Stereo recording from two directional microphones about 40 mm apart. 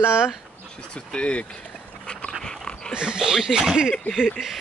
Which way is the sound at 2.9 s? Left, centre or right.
Right.